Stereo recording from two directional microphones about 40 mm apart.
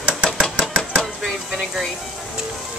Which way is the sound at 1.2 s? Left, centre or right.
Centre.